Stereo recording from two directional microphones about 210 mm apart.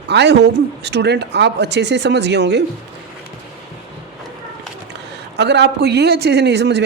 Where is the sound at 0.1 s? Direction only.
55° right (ahead or behind).